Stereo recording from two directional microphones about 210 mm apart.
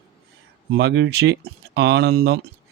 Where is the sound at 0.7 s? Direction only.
50° right (ahead or behind).